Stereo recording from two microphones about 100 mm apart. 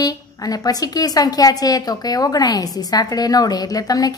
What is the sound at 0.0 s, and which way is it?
A woman's voice, 40° left (ahead or behind).